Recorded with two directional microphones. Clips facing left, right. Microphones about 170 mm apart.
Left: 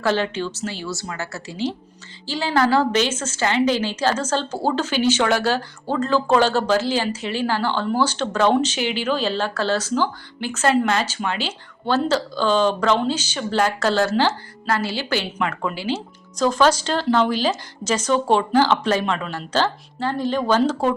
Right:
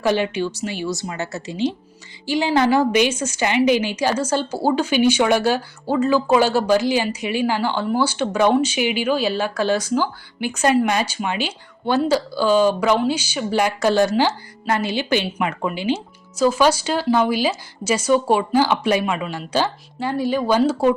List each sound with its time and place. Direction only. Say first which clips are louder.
0.0 s a woman's voice: right 2 dB; 15° right (ahead or behind)